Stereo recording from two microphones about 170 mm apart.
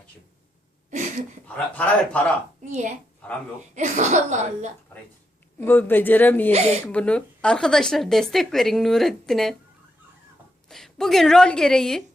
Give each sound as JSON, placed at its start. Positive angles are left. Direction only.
{"t": 1.5, "sound": "speech", "side_deg": 10}
{"t": 2.6, "sound": "speech", "side_deg": -45}
{"t": 5.6, "sound": "speech", "side_deg": 10}
{"t": 6.5, "sound": "speech", "side_deg": -40}
{"t": 6.8, "sound": "speech", "side_deg": 5}
{"t": 10.7, "sound": "speech", "side_deg": 0}